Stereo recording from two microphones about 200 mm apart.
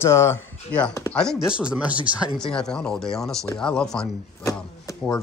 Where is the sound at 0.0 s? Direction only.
15° left (ahead or behind).